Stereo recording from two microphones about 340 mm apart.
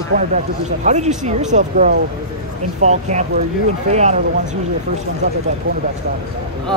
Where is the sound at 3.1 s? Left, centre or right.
Centre.